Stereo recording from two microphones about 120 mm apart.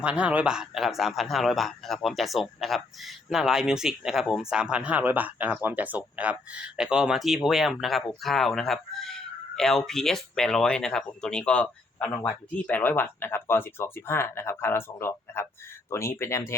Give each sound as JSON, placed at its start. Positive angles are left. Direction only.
{"t": 0.0, "sound": "speech", "side_deg": -10}
{"t": 12.7, "sound": "speech", "side_deg": 15}